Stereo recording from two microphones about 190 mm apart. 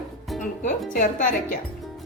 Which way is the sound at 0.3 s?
Centre (ahead or behind).